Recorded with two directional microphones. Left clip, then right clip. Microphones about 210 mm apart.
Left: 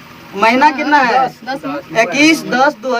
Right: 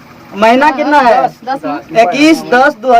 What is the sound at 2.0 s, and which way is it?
Speech, 5° left (ahead or behind).